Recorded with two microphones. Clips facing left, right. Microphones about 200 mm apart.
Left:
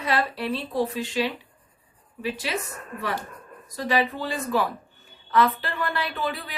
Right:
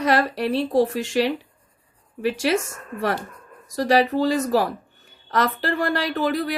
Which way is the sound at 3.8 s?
40° right (ahead or behind).